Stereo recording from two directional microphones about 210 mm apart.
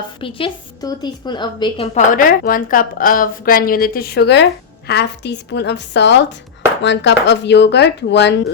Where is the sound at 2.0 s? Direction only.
40° left (ahead or behind).